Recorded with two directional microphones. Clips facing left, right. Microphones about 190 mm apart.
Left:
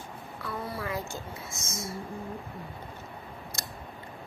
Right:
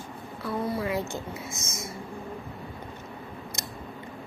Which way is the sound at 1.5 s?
20° right (ahead or behind).